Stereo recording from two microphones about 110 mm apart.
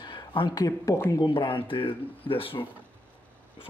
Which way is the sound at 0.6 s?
30° left (ahead or behind).